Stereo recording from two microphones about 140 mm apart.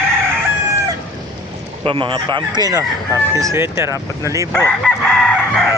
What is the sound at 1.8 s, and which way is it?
Speech, 40° right (ahead or behind).